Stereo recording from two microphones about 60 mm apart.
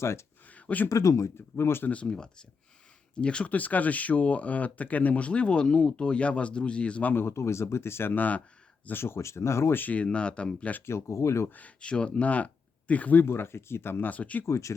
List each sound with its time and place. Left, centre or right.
0.0 s speech: left
0.4 s a sound: left
0.9 s speech: left
1.4 s speech: left
1.9 s speech: centre
7.1 s speech: left
8.9 s speech: left
9.7 s speech: left
10.8 s speech: left
11.4 s speech: left
13.2 s speech: left
14.1 s speech: left
14.4 s speech: left